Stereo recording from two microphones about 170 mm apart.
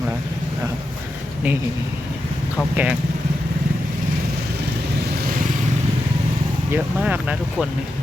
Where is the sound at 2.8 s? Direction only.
10° right (ahead or behind).